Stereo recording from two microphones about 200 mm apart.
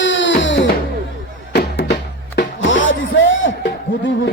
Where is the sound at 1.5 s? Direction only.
55° left (ahead or behind).